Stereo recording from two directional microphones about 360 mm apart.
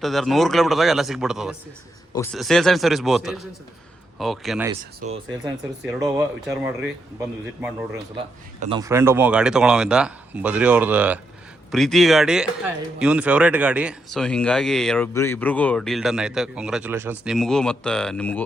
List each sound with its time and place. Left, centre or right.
0.0 s speech: centre
4.9 s speech: centre
5.8 s speech: centre
8.6 s speech: centre